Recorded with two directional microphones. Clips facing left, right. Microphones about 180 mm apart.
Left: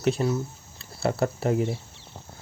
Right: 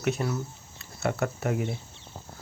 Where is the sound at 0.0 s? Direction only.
30° left (ahead or behind).